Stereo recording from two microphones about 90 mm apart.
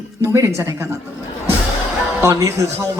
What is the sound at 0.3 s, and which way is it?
Speech, 30° right (ahead or behind).